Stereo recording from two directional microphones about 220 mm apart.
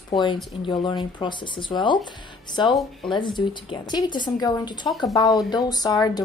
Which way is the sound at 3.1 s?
20° left (ahead or behind).